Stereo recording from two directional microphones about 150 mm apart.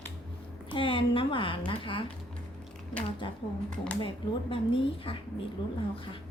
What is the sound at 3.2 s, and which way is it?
A woman's voice, 35° left (ahead or behind).